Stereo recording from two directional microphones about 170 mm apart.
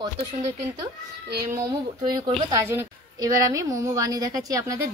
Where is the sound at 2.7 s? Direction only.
15° right (ahead or behind).